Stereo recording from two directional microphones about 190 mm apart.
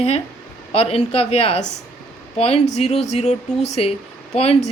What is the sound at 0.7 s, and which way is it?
Speech, 30° left (ahead or behind).